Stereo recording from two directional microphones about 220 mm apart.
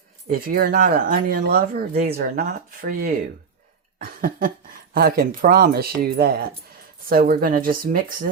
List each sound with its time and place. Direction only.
0.3 s speech: 40° right (ahead or behind)
3.9 s cough: 40° right (ahead or behind)
4.9 s speech: 45° right (ahead or behind)